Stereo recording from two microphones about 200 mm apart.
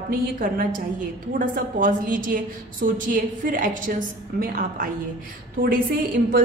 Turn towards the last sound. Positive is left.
turn(degrees=-45)  # may be behind; listen again after turning